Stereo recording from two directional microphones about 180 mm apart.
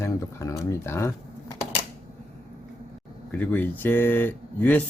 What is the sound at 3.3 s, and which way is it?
Speech, 10° left (ahead or behind).